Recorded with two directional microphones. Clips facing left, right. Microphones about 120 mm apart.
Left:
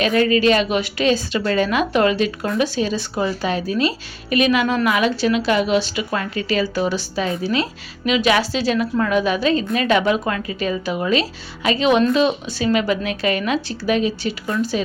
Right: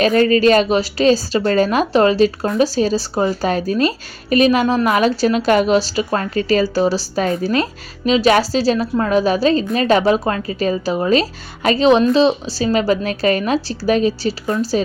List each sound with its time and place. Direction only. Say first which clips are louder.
0.0 s speech: right 3 dB; 40° right (ahead or behind)